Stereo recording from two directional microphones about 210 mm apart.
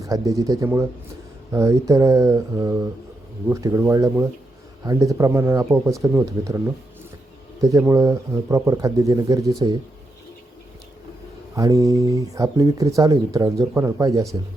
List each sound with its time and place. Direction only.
0.0 s speech: 15° right (ahead or behind)
11.5 s speech: 15° right (ahead or behind)